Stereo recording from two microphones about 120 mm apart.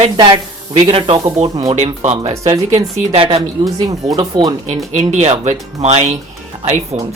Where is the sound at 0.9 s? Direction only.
50° right (ahead or behind).